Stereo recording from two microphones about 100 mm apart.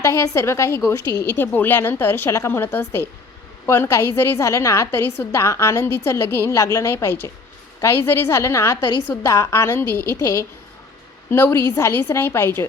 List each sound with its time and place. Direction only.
0.0 s a woman's voice: 30° left (ahead or behind)